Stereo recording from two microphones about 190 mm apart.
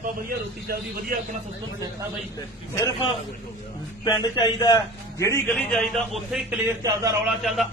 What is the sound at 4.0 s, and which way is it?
A man's voice, 25° left (ahead or behind).